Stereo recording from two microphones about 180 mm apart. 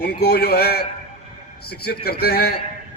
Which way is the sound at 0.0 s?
60° left (ahead or behind).